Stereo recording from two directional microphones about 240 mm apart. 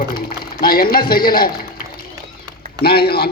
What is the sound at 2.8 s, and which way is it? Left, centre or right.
Speech, left.